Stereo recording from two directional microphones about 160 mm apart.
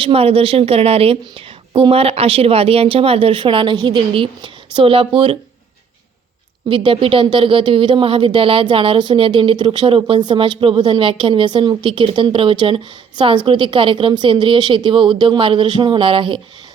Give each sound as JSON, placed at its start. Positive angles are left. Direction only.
{"t": 0.0, "sound": "a woman's voice", "side_deg": -35}
{"t": 6.7, "sound": "a woman's voice", "side_deg": -35}